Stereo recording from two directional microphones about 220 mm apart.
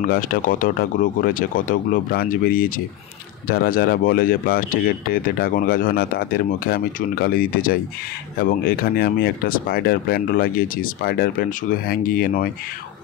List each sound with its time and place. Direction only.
0.0 s speech: 40° left (ahead or behind)